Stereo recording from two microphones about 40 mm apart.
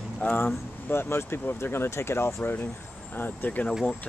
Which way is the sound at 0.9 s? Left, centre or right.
Left.